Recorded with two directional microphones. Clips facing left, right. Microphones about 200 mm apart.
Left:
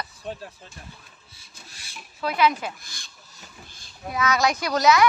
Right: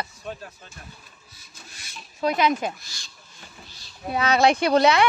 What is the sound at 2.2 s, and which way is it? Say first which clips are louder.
Speech: right 1 dB; 20° right (ahead or behind).